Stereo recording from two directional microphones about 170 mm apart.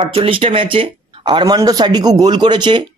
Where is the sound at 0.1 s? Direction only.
35° right (ahead or behind).